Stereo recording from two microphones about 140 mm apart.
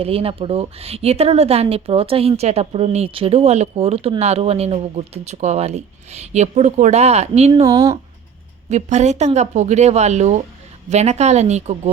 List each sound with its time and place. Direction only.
0.0 s speech: 45° right (ahead or behind)
7.5 s speech: 25° right (ahead or behind)
8.7 s speech: 55° right (ahead or behind)